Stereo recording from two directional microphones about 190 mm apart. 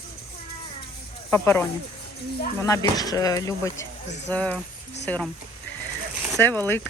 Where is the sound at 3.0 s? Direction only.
20° left (ahead or behind).